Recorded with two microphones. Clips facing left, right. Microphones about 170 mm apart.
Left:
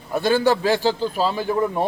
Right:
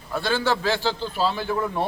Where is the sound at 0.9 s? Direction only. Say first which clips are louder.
Left 4 dB; 45° left (ahead or behind).